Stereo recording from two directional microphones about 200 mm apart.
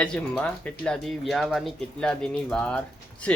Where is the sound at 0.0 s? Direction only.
5° left (ahead or behind).